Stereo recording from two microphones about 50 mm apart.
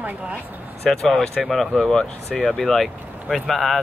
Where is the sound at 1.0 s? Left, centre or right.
Centre.